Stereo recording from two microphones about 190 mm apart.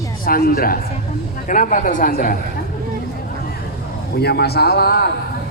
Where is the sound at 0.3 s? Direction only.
50° left (ahead or behind).